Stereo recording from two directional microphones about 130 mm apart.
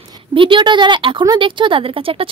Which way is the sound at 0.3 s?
40° right (ahead or behind).